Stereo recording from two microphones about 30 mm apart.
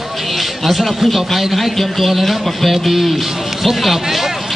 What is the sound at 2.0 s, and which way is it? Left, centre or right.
A man's voice, centre.